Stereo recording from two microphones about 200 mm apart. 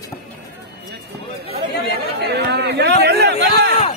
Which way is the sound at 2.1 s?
60° right (ahead or behind).